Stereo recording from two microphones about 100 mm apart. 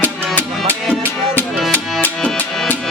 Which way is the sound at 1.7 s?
20° left (ahead or behind).